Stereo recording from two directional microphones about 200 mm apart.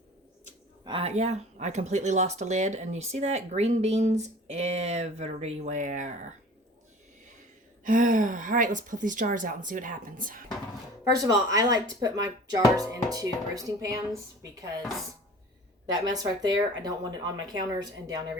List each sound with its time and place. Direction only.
0.9 s speech: 30° right (ahead or behind)
7.9 s speech: 40° right (ahead or behind)
11.2 s speech: 20° right (ahead or behind)
15.9 s speech: 20° right (ahead or behind)